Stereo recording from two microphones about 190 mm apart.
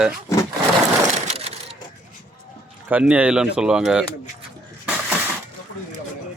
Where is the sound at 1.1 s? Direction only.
35° right (ahead or behind).